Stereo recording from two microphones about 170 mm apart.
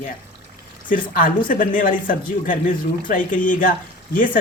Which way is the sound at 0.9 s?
55° left (ahead or behind).